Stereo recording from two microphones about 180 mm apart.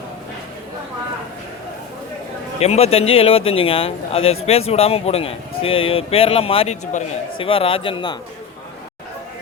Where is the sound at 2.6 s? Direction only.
35° left (ahead or behind).